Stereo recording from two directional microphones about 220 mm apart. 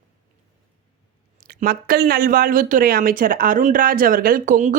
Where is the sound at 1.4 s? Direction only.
40° right (ahead or behind).